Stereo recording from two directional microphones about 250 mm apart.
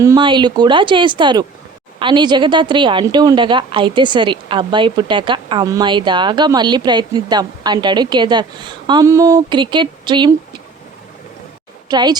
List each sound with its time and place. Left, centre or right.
0.0 s a woman's voice: centre
11.9 s a woman's voice: centre